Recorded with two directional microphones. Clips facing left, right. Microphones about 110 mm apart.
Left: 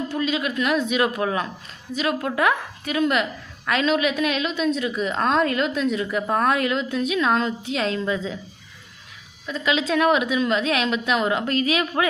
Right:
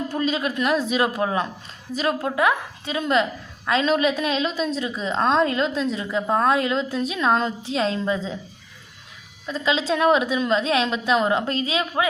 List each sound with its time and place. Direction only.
0.1 s a woman's voice: 40° right (ahead or behind)
1.9 s a woman's voice: 40° right (ahead or behind)
2.2 s a woman's voice: 20° right (ahead or behind)
9.5 s a woman's voice: 30° right (ahead or behind)